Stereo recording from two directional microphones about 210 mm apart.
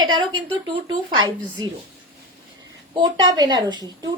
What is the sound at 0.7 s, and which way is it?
Speech, 20° right (ahead or behind).